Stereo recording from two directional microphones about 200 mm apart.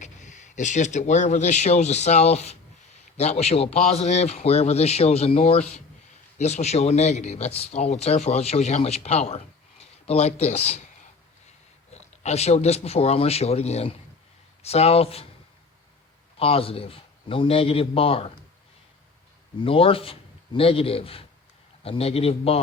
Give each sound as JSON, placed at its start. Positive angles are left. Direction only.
{"t": 0.0, "sound": "speech", "side_deg": 35}
{"t": 11.9, "sound": "speech", "side_deg": 35}
{"t": 16.4, "sound": "speech", "side_deg": 30}
{"t": 19.6, "sound": "speech", "side_deg": 30}